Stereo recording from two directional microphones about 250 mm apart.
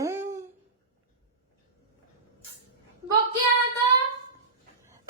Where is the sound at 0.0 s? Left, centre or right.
Centre.